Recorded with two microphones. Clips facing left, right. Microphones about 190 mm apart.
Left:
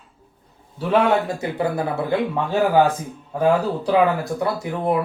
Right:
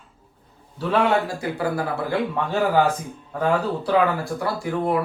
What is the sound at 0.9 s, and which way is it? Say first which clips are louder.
Speech: left 2 dB; 20° left (ahead or behind).